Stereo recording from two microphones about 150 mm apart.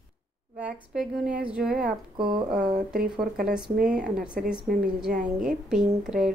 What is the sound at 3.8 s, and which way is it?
Speech, 5° right (ahead or behind).